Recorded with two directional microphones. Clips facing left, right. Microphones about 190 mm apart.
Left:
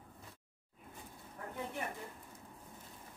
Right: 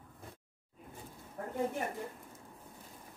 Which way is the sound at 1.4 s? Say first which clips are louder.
Right 6 dB; 45° right (ahead or behind).